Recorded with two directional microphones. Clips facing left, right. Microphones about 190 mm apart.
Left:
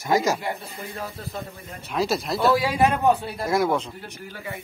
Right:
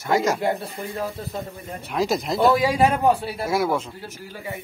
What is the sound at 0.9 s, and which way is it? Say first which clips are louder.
Speech: right 4 dB; 15° right (ahead or behind).